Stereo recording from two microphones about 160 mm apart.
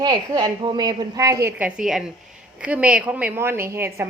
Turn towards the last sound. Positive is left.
turn(degrees=-15)  # may be behind; listen again after turning